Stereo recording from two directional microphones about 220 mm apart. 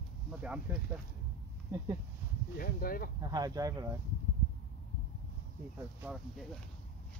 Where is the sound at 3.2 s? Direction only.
15° right (ahead or behind).